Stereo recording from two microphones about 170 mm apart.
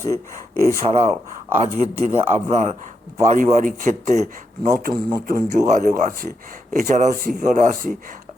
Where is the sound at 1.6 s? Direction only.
40° right (ahead or behind).